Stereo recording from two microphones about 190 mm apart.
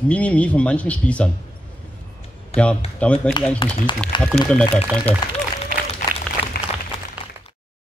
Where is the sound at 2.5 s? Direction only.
35° left (ahead or behind).